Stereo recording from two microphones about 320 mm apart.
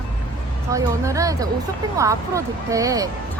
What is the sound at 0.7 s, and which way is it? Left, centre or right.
Speech, centre.